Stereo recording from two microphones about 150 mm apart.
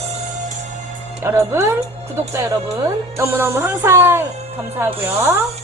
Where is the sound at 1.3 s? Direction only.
20° right (ahead or behind).